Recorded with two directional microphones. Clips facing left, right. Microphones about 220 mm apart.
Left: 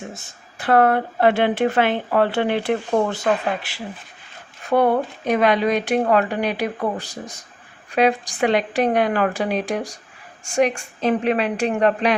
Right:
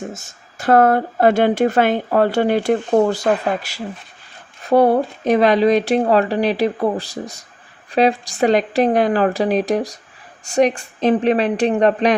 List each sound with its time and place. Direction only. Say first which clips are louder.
0.6 s speech: right 3 dB; 40° right (ahead or behind)